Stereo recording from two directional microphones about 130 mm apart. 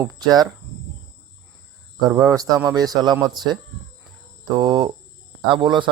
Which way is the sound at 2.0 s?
25° right (ahead or behind).